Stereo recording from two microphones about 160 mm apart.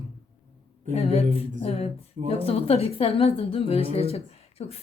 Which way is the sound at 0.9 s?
40° left (ahead or behind).